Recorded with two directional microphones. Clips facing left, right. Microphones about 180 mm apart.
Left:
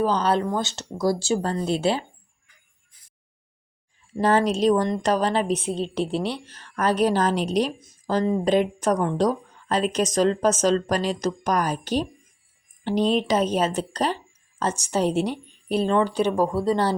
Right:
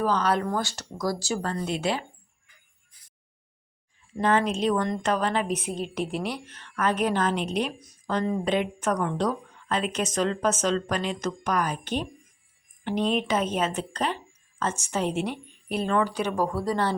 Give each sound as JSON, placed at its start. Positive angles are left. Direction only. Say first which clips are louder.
{"t": 0.0, "sound": "speech", "louder": "left 3 dB", "side_deg": 30}
{"t": 4.2, "sound": "speech", "louder": "left 4 dB", "side_deg": 35}